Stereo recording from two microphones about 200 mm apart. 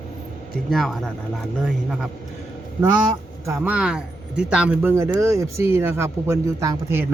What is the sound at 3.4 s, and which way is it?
Speech, 10° right (ahead or behind).